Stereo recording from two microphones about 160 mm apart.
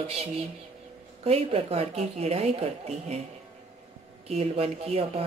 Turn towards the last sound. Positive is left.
turn(degrees=-40)  # may be behind; listen again after turning